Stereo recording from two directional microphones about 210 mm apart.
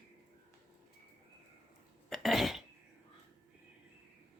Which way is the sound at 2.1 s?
Centre (ahead or behind).